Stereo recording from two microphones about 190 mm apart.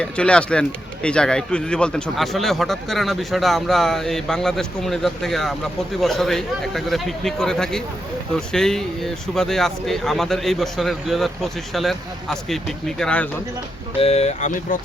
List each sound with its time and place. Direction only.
0.0 s speech: 5° left (ahead or behind)
14.0 s speech: 35° left (ahead or behind)